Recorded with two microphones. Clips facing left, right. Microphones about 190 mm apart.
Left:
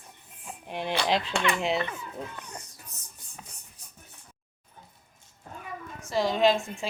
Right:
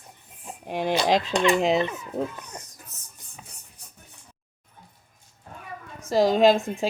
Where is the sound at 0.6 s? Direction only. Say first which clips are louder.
Right 5 dB; 45° right (ahead or behind).